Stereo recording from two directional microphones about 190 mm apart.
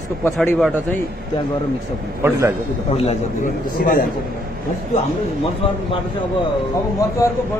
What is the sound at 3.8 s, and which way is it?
Speech, 50° left (ahead or behind).